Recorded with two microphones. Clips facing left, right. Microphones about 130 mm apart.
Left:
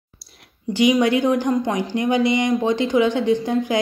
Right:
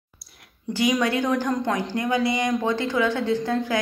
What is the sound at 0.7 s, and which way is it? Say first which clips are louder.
Speech: left 5 dB; 20° left (ahead or behind).